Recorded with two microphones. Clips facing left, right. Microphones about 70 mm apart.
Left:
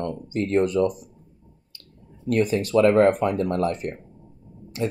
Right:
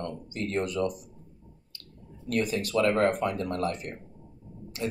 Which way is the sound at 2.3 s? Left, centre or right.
Left.